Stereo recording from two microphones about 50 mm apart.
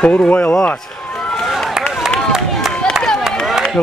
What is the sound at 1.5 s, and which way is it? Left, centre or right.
Run, centre.